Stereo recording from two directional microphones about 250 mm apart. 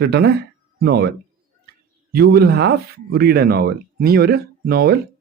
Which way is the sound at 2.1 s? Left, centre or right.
Right.